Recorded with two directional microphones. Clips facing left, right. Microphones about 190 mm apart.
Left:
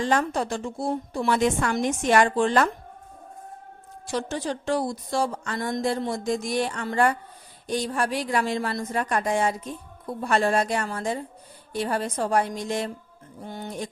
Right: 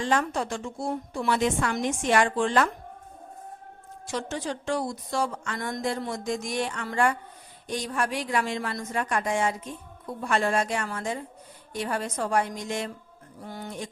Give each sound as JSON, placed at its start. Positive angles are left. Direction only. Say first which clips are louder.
{"t": 0.0, "sound": "speech", "louder": "left 2 dB", "side_deg": 40}
{"t": 4.0, "sound": "speech", "louder": "left 3 dB", "side_deg": 35}
{"t": 13.4, "sound": "speech", "louder": "left 2 dB", "side_deg": 25}